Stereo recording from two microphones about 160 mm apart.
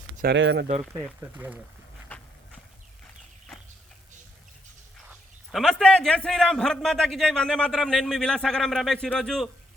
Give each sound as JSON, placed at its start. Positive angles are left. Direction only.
{"t": 0.2, "sound": "speech", "side_deg": -75}
{"t": 1.4, "sound": "speech", "side_deg": -10}
{"t": 2.1, "sound": "a sound", "side_deg": 10}
{"t": 5.5, "sound": "a man's voice", "side_deg": 0}